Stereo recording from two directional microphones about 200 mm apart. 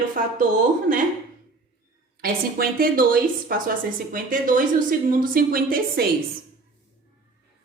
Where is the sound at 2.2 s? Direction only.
50° right (ahead or behind).